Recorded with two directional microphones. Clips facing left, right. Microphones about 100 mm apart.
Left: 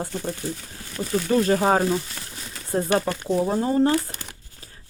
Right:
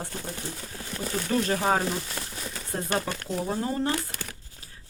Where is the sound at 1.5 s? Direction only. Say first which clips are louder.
Left 4 dB; 40° left (ahead or behind).